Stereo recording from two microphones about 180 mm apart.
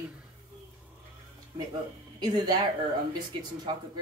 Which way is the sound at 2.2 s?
25° right (ahead or behind).